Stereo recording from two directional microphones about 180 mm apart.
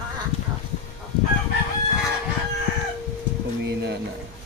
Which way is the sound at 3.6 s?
70° right (ahead or behind).